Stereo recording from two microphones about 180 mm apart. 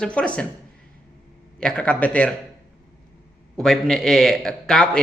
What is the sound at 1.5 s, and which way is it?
Speech, 5° left (ahead or behind).